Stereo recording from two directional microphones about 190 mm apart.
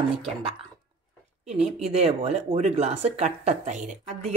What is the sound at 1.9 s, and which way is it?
Speech, 30° right (ahead or behind).